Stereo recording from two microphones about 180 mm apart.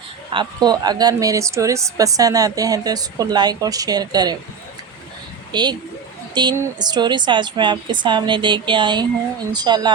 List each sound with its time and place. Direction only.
0.3 s speech: 20° right (ahead or behind)
5.5 s a woman's voice: 25° right (ahead or behind)